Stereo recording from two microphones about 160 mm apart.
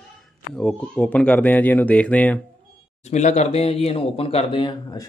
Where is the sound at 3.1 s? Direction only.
45° left (ahead or behind).